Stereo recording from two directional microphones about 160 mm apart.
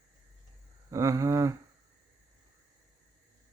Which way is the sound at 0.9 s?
20° right (ahead or behind).